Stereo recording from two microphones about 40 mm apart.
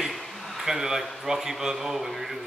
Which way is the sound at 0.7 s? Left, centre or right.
Centre.